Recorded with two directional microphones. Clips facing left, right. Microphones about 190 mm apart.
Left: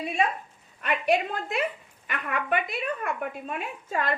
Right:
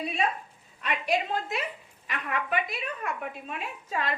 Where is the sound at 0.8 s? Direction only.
55° left (ahead or behind).